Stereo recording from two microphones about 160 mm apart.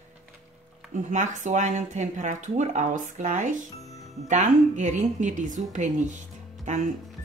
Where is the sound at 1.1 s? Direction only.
50° right (ahead or behind).